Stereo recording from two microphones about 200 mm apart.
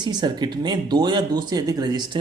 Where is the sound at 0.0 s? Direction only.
20° right (ahead or behind).